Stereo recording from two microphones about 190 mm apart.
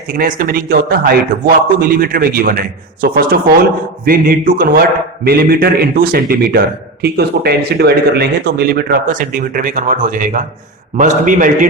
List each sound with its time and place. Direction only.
0.1 s a man's voice: 50° right (ahead or behind)